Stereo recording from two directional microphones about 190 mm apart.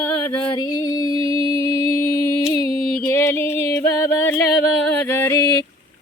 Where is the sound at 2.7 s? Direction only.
50° left (ahead or behind).